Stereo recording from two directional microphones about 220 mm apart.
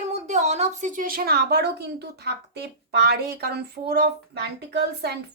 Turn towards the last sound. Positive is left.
turn(degrees=-50)  # may be behind; listen again after turning